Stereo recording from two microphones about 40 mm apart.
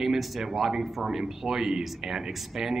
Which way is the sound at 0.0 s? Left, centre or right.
Centre.